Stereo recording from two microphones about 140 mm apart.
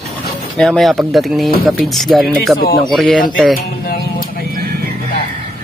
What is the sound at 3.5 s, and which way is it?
Music, 90° left.